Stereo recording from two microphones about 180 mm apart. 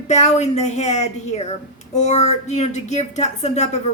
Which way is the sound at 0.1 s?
40° left (ahead or behind).